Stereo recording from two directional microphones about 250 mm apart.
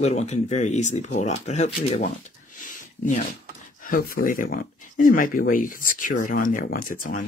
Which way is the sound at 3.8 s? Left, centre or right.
Left.